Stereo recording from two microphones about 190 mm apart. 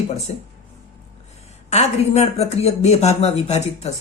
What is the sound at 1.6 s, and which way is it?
Speech, 35° left (ahead or behind).